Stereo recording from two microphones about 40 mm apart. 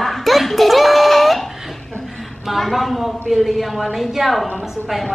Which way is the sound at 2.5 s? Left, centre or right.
Centre.